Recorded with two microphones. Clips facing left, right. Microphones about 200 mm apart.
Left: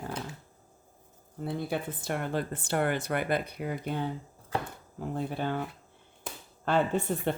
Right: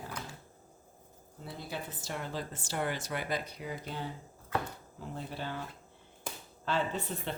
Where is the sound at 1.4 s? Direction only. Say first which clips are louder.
Left 9 dB; 55° left (ahead or behind).